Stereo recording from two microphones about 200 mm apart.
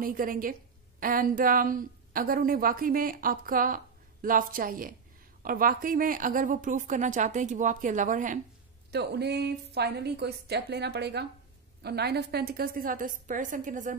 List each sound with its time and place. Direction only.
0.0 s a woman's voice: 45° right (ahead or behind)
8.9 s a woman's voice: 55° right (ahead or behind)